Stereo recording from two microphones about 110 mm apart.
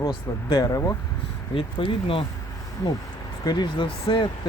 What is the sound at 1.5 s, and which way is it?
Speech, 55° left (ahead or behind).